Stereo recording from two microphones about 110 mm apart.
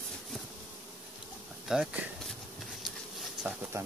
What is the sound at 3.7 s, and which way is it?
Pigeon, 25° right (ahead or behind).